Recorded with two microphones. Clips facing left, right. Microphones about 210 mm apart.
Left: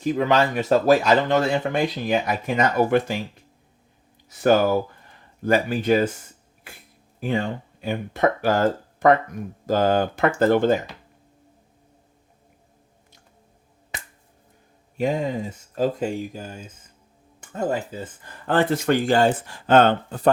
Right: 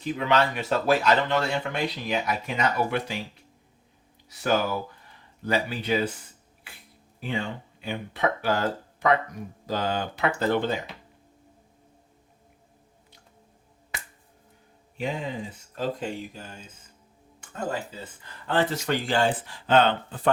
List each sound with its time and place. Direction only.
0.0 s speech: 45° left (ahead or behind)
4.3 s speech: 50° left (ahead or behind)
7.2 s speech: 45° left (ahead or behind)
14.9 s speech: 45° left (ahead or behind)